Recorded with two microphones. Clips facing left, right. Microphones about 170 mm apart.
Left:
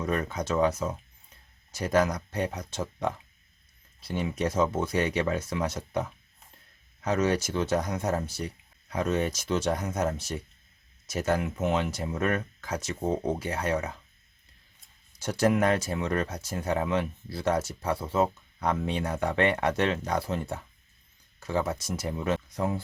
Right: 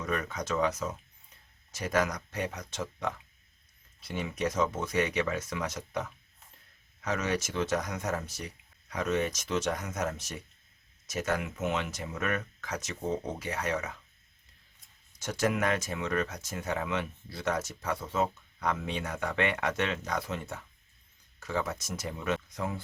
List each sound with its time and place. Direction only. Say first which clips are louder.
0.0 s speech: left 4 dB; 30° left (ahead or behind)
15.2 s speech: left 5 dB; 35° left (ahead or behind)